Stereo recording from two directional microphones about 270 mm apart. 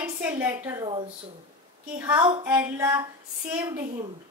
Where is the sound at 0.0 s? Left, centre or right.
Centre.